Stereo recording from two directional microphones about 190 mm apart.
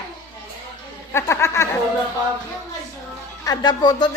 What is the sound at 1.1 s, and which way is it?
Speech, 15° left (ahead or behind).